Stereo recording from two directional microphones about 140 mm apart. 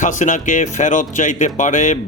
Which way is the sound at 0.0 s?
65° left (ahead or behind).